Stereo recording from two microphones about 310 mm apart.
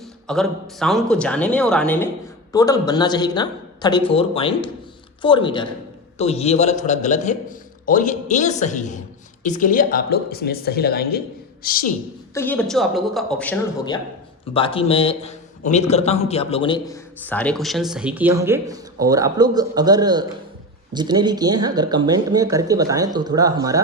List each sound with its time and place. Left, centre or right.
0.3 s a man's voice: centre; by 11.9 s left
12.3 s a man's voice: centre
16.9 s speech: centre